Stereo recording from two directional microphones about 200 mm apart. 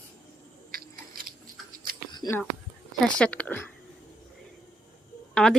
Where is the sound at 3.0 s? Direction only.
5° left (ahead or behind).